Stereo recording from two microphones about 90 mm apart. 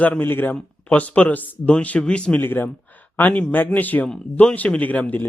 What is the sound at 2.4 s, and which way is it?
Speech, 25° left (ahead or behind).